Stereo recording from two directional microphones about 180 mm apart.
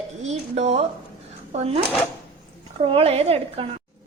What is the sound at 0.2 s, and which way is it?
A woman's voice, 40° right (ahead or behind).